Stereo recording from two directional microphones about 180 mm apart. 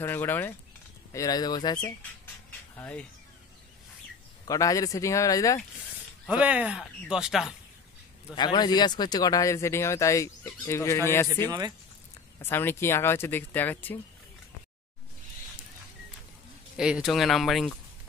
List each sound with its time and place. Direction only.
0.0 s speech: 10° left (ahead or behind)
2.7 s speech: 10° left (ahead or behind)
4.5 s speech: 20° left (ahead or behind)
6.2 s speech: 5° right (ahead or behind)
8.4 s speech: 25° left (ahead or behind)
11.4 s speech: 20° right (ahead or behind)
12.4 s speech: 10° left (ahead or behind)
16.7 s speech: 5° right (ahead or behind)